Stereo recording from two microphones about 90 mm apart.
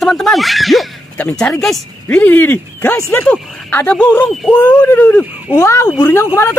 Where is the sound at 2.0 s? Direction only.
15° left (ahead or behind).